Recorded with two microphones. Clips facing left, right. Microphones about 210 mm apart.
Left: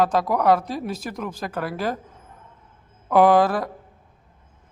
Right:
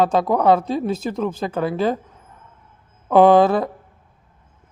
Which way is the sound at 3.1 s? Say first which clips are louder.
Right 4 dB; 25° right (ahead or behind).